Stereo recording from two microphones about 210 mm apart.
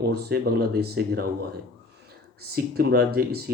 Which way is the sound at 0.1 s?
50° right (ahead or behind).